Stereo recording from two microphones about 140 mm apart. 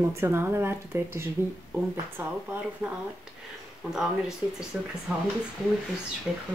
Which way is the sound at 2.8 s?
15° right (ahead or behind).